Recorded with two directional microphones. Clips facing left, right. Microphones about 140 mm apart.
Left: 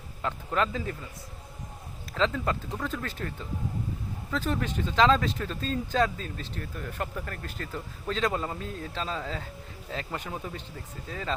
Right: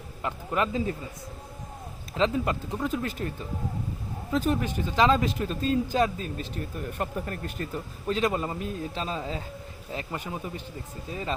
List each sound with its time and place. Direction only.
0.2 s speech: 10° right (ahead or behind)
2.1 s speech: 15° right (ahead or behind)